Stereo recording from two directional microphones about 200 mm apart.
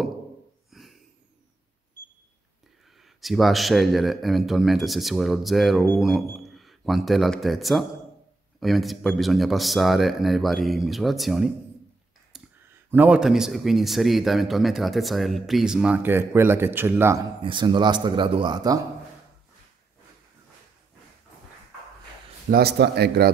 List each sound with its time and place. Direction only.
0.7 s a sound: centre (ahead or behind)
3.2 s a man's voice: centre (ahead or behind)
12.9 s a man's voice: 5° right (ahead or behind)
17.4 s a man's voice: 25° right (ahead or behind)
22.5 s speech: 55° right (ahead or behind)